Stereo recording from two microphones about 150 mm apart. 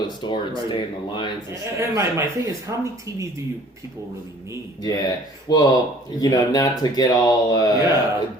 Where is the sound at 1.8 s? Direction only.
20° right (ahead or behind).